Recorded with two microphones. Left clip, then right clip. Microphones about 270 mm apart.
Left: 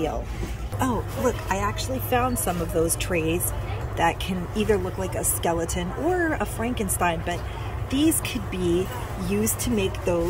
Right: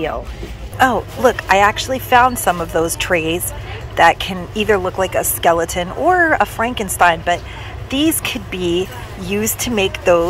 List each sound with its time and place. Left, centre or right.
1.2 s speech: centre
2.0 s speech: centre